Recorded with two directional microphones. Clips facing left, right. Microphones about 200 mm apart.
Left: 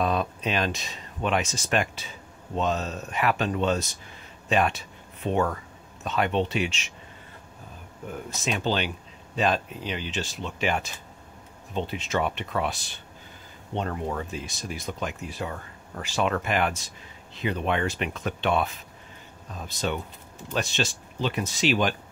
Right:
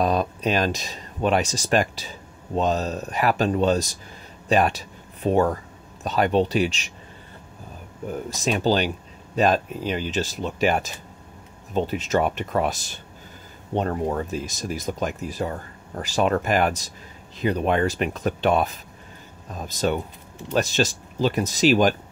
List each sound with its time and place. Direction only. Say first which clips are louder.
0.0 s speech: right 4 dB; 40° right (ahead or behind)
8.1 s speech: right 5 dB; 40° right (ahead or behind)